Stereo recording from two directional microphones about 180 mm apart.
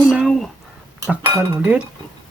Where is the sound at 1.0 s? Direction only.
20° right (ahead or behind).